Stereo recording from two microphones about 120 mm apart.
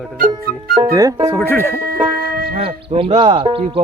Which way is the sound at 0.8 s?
30° right (ahead or behind).